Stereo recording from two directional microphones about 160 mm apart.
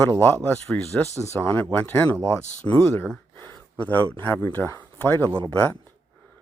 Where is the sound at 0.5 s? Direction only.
10° left (ahead or behind).